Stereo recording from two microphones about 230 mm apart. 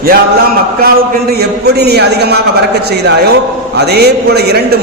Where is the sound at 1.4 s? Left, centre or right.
Right.